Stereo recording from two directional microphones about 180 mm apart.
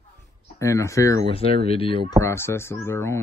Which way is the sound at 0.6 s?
15° left (ahead or behind).